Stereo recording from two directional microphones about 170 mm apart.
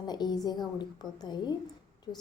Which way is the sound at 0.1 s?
25° left (ahead or behind).